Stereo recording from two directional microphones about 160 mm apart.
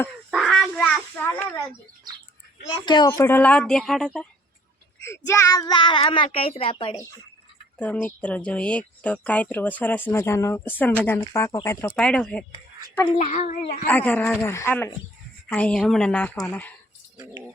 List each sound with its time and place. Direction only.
0.3 s a sound: centre (ahead or behind)
2.7 s speech: 30° left (ahead or behind)
3.1 s speech: 15° left (ahead or behind)
5.0 s speech: 15° left (ahead or behind); by 6.9 s 35° left (ahead or behind)
7.8 s speech: 10° left (ahead or behind)
13.1 s speech: 50° left (ahead or behind)
13.8 s speech: 10° left (ahead or behind)